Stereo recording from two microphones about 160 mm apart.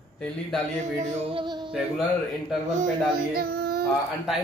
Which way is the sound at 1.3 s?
30° right (ahead or behind).